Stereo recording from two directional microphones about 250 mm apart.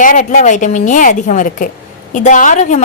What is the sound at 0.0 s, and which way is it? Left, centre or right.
A woman's voice, left.